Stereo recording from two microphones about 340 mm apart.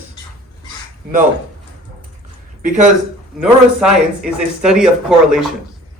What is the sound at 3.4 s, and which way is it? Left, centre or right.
Speech, centre.